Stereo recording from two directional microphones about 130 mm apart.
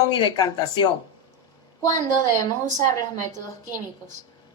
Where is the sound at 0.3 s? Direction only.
30° left (ahead or behind).